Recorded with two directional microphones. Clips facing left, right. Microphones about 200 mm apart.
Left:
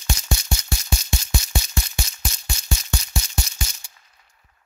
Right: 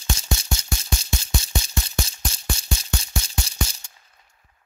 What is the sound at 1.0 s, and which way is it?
Music, 30° right (ahead or behind).